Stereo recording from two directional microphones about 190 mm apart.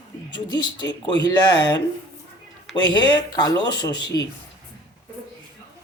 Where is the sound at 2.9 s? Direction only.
25° left (ahead or behind).